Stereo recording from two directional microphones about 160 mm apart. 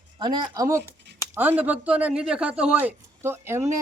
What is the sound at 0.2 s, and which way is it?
Speech, 30° right (ahead or behind).